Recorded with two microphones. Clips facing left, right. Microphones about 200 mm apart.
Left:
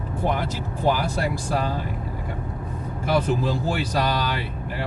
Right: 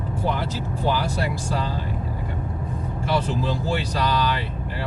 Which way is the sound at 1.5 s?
50° left (ahead or behind).